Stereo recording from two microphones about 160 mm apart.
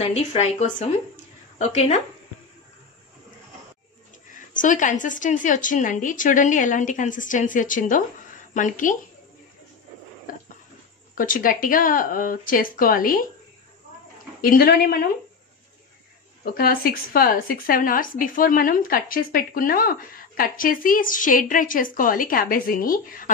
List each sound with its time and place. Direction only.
0.0 s speech: 45° left (ahead or behind)
4.3 s a woman's voice: 55° left (ahead or behind)
10.3 s pig: 55° left (ahead or behind)
11.1 s speech: 60° left (ahead or behind)
14.4 s speech: 70° left (ahead or behind)
16.4 s speech: 65° left (ahead or behind)